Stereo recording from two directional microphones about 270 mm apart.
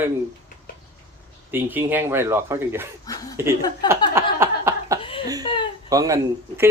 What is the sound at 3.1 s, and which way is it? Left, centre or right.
Speech, centre.